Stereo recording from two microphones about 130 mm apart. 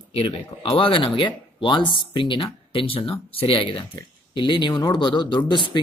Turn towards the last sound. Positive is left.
turn(degrees=40)  # may be behind; listen again after turning